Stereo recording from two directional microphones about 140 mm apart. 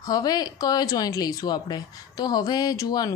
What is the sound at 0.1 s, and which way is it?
Speech, 30° left (ahead or behind).